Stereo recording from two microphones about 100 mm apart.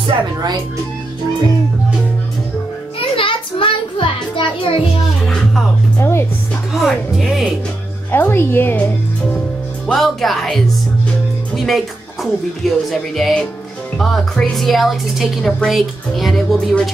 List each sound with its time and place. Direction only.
0.0 s speech: 45° right (ahead or behind)
3.0 s music: 60° left (ahead or behind)
5.2 s music: 5° left (ahead or behind)
5.9 s music: 25° left (ahead or behind)
6.7 s speech: centre (ahead or behind)
8.1 s speech: 20° left (ahead or behind)
9.8 s speech: centre (ahead or behind)